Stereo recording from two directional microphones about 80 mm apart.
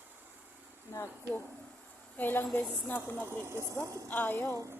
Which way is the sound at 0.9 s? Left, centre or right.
Left.